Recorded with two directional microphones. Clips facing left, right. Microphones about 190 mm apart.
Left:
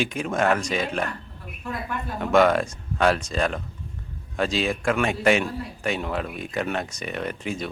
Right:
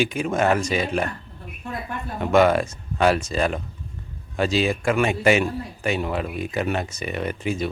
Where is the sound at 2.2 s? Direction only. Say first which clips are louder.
Right 1 dB; centre (ahead or behind).